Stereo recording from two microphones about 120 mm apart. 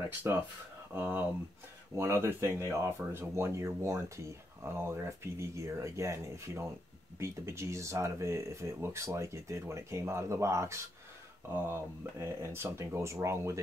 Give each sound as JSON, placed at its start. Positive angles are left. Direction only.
{"t": 0.9, "sound": "speech", "side_deg": -15}